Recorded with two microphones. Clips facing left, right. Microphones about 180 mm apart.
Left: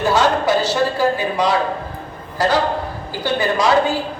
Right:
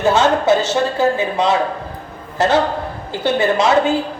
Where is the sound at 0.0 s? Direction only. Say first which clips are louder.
Right 2 dB; 25° right (ahead or behind).